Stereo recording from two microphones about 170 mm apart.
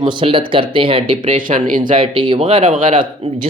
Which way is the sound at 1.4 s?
50° right (ahead or behind).